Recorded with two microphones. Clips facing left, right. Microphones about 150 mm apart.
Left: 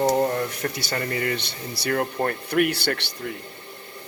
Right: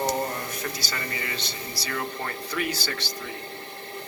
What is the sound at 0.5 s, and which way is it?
Speech, 65° left (ahead or behind).